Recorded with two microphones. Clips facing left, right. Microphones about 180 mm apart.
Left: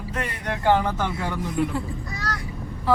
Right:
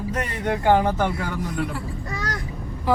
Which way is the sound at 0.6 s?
15° right (ahead or behind).